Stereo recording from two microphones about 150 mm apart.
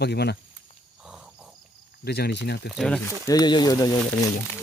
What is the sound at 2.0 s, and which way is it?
Speech, 90° left.